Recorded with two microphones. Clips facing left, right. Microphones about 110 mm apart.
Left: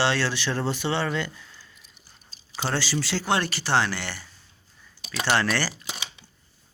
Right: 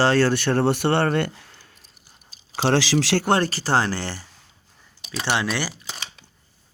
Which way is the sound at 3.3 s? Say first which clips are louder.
Right 1 dB; 40° right (ahead or behind).